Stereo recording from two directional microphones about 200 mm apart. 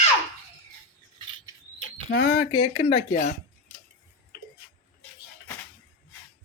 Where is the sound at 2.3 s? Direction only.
35° left (ahead or behind).